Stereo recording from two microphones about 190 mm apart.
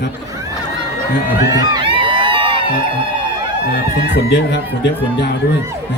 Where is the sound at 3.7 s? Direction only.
65° left (ahead or behind).